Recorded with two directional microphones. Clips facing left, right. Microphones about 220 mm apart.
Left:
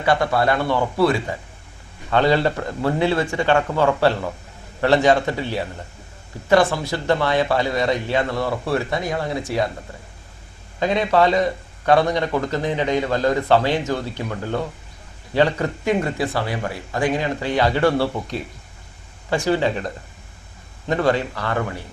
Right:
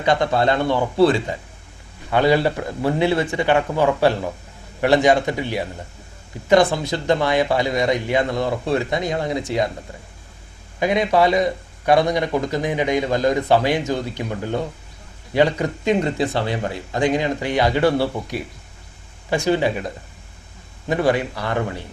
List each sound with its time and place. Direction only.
0.0 s a man's voice: 20° right (ahead or behind)
2.0 s speech: 15° right (ahead or behind)
10.8 s speech: 15° right (ahead or behind)